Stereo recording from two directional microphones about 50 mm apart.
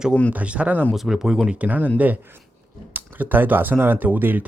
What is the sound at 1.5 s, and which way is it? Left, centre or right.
Speech, right.